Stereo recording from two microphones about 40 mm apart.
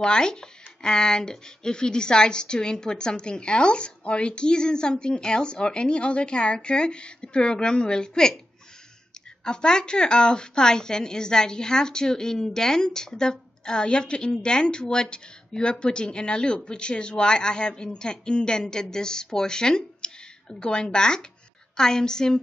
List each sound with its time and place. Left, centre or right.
0.0 s speech: centre
9.4 s a woman's voice: centre